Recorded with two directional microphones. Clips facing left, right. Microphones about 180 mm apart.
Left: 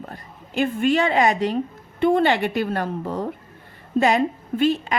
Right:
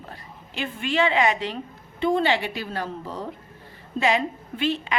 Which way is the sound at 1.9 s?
55° left (ahead or behind).